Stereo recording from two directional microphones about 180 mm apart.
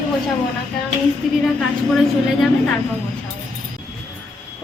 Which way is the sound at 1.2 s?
Centre (ahead or behind).